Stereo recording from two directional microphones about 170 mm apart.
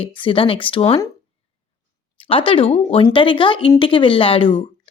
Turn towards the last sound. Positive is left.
turn(degrees=30)  # may be behind; listen again after turning